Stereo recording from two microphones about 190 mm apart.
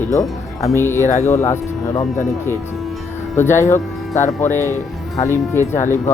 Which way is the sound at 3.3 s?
15° left (ahead or behind).